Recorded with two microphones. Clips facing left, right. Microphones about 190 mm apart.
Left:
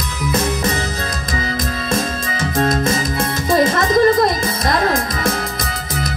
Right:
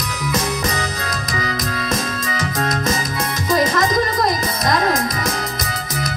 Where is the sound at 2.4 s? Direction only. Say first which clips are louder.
Left 6 dB; 25° left (ahead or behind).